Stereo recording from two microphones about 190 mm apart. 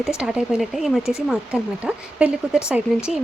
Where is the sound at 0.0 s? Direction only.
5° right (ahead or behind).